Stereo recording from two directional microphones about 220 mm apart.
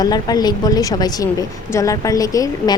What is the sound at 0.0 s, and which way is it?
A woman's voice, 20° left (ahead or behind).